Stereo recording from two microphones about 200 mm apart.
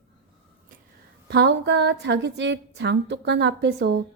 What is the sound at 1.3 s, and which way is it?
A woman's voice, 55° right (ahead or behind).